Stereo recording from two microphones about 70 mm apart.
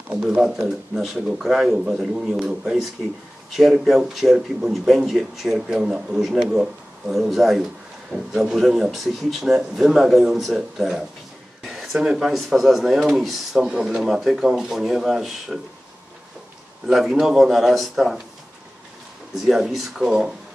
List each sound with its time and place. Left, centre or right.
0.1 s a man's voice: centre
16.8 s a man's voice: centre
19.4 s a man's voice: centre